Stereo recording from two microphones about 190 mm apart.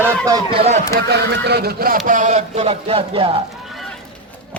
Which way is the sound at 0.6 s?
35° right (ahead or behind).